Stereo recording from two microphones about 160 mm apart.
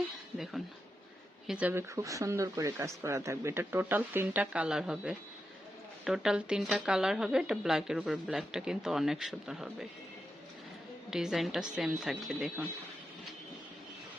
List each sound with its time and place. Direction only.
0.3 s speech: centre (ahead or behind)
2.0 s speech: 20° right (ahead or behind); by 9.8 s centre (ahead or behind)
11.1 s speech: 5° right (ahead or behind)